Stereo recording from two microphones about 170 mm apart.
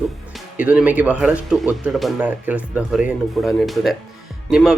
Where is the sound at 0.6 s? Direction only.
10° right (ahead or behind).